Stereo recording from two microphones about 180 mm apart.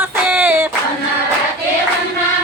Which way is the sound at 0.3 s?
10° right (ahead or behind).